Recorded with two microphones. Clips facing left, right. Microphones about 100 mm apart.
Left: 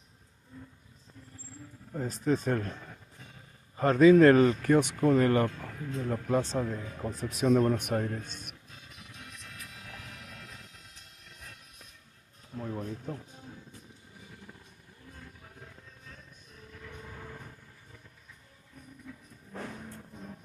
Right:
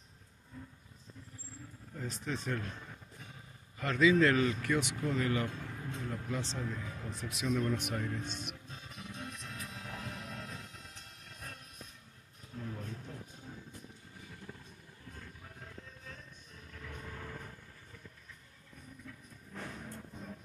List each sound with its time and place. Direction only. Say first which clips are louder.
2.0 s speech: left 10 dB; 40° left (ahead or behind)
3.7 s speech: left 8 dB; 40° left (ahead or behind)
8.6 s music: right 4 dB; 30° right (ahead or behind)
12.5 s a sound: left 7 dB; 45° left (ahead or behind)
19.1 s music: left 6 dB; 10° left (ahead or behind)